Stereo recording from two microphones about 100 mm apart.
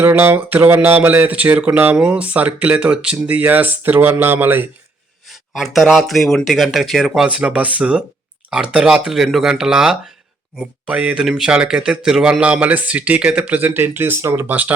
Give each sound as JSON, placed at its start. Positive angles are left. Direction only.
{"t": 0.0, "sound": "speech", "side_deg": -20}
{"t": 5.5, "sound": "speech", "side_deg": 0}